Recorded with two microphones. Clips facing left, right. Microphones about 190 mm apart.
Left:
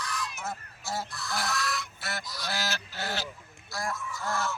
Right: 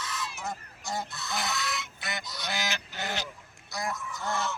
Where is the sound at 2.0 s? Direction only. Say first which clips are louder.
Right 1 dB; centre (ahead or behind).